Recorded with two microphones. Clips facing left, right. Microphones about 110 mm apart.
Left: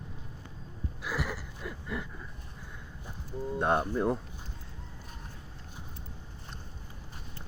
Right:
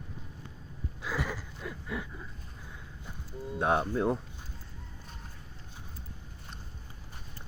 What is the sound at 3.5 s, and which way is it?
Speech, 5° right (ahead or behind).